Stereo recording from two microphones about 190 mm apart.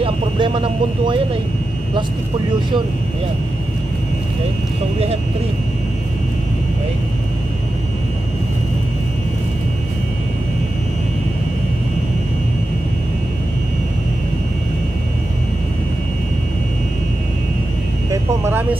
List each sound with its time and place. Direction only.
0.0 s speech: 25° right (ahead or behind)
18.1 s speech: 10° right (ahead or behind)